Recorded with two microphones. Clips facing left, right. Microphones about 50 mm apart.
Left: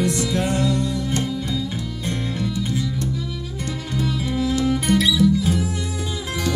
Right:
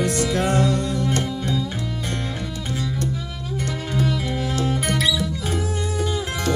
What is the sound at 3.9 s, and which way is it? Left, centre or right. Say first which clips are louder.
Music: left 1 dB; right.